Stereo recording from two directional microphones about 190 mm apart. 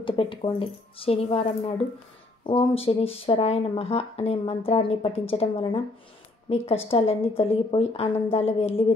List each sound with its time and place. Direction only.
0.0 s speech: 25° left (ahead or behind)